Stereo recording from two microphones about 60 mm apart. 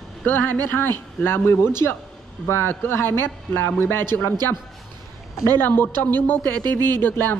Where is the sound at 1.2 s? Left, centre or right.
Left.